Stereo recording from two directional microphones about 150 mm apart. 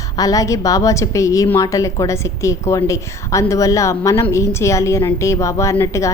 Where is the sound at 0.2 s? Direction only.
25° left (ahead or behind).